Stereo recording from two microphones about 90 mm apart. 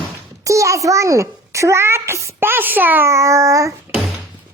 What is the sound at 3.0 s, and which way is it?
Babbling, 35° right (ahead or behind).